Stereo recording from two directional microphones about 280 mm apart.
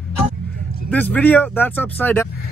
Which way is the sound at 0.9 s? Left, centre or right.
Centre.